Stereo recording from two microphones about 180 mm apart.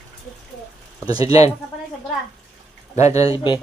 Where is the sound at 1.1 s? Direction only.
20° right (ahead or behind).